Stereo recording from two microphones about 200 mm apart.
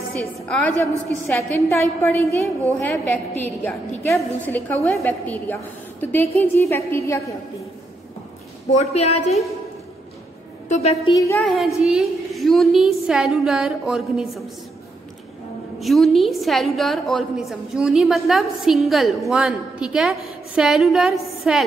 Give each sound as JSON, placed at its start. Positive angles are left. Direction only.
{"t": 1.2, "sound": "a woman's voice", "side_deg": 10}
{"t": 8.6, "sound": "a woman's voice", "side_deg": 30}
{"t": 10.7, "sound": "a woman's voice", "side_deg": 30}
{"t": 11.4, "sound": "a woman's voice", "side_deg": 0}
{"t": 15.8, "sound": "a woman's voice", "side_deg": 0}